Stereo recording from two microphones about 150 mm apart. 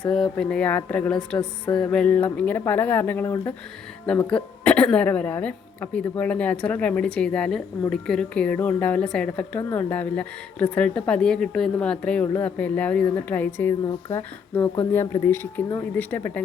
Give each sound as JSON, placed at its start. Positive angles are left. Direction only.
{"t": 0.1, "sound": "a woman's voice", "side_deg": 5}